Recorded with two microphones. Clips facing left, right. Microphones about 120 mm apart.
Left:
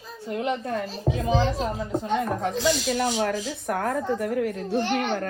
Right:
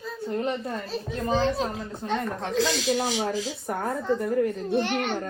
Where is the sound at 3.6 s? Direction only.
90° left.